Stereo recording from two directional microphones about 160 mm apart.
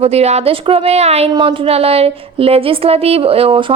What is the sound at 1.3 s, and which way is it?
A woman's voice, 30° right (ahead or behind).